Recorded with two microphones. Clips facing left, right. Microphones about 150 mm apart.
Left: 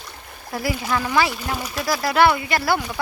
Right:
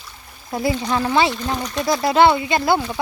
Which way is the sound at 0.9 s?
25° right (ahead or behind).